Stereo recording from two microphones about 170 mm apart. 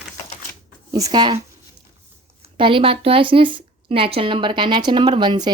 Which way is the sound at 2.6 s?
30° right (ahead or behind).